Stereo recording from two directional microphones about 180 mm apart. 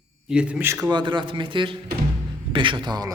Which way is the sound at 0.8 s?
25° right (ahead or behind).